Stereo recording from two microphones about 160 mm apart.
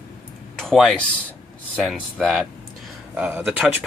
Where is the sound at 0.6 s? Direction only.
Centre (ahead or behind).